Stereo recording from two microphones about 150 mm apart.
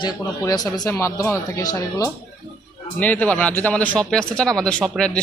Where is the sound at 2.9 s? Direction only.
10° left (ahead or behind).